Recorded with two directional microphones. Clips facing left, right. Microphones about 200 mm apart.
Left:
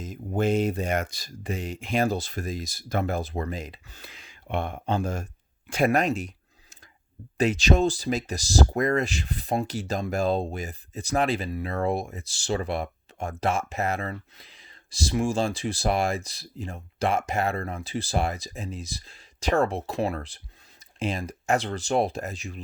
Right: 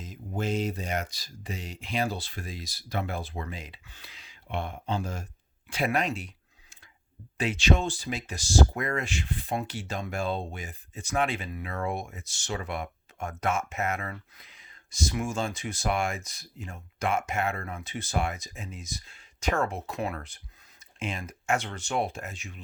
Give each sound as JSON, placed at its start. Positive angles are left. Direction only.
{"t": 0.0, "sound": "speech", "side_deg": 50}